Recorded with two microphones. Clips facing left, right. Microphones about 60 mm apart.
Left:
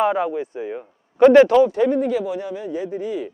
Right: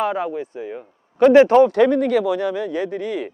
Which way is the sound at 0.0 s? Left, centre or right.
Centre.